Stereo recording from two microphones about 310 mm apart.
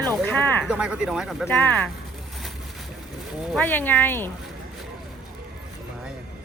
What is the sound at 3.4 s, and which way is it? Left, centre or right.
Speech, centre.